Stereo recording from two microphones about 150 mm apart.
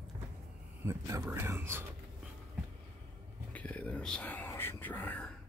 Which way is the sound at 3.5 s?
10° left (ahead or behind).